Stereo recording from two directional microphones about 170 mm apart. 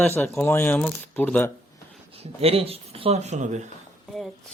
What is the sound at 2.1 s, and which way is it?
Speech, 35° right (ahead or behind).